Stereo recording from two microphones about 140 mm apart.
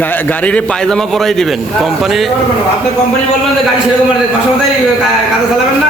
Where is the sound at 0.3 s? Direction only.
10° left (ahead or behind).